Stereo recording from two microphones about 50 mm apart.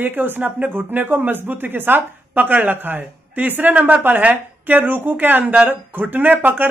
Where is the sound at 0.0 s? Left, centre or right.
Right.